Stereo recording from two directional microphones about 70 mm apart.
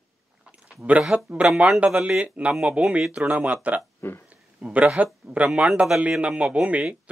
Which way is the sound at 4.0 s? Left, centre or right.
Left.